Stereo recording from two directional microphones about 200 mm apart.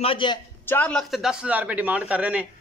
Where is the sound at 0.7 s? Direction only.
5° left (ahead or behind).